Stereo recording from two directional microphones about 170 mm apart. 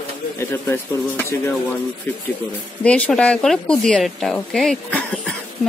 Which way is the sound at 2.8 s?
5° left (ahead or behind).